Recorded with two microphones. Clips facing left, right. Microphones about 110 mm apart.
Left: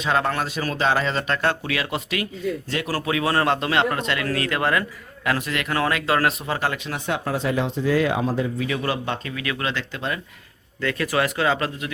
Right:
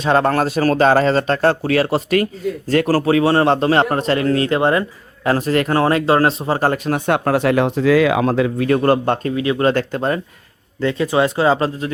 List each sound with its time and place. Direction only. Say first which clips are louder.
0.0 s speech: right 7 dB; 35° right (ahead or behind)
9.3 s speech: right 10 dB; 30° right (ahead or behind)
9.6 s speech: right 11 dB; 45° right (ahead or behind)
10.8 s speech: right 6 dB; 25° right (ahead or behind)